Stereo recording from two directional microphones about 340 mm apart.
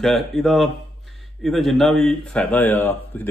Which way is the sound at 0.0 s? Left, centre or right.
Centre.